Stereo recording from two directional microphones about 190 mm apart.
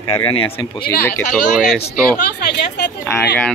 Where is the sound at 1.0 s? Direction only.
5° left (ahead or behind).